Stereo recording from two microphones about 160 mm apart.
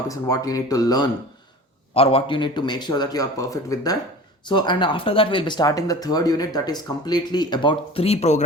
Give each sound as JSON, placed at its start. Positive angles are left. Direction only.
{"t": 0.1, "sound": "speech", "side_deg": 20}
{"t": 1.9, "sound": "speech", "side_deg": 35}